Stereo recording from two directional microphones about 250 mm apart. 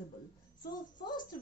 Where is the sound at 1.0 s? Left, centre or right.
Centre.